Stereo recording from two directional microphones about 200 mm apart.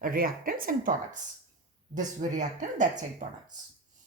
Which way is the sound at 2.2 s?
40° right (ahead or behind).